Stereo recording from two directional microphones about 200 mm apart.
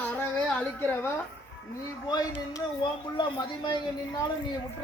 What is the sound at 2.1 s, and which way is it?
Speech, 20° left (ahead or behind).